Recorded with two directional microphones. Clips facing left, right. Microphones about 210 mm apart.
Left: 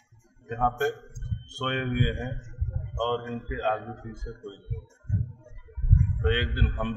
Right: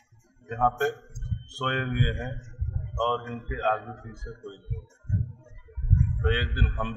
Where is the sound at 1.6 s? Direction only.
15° left (ahead or behind).